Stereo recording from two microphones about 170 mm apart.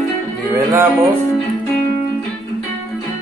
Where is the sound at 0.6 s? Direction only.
20° right (ahead or behind).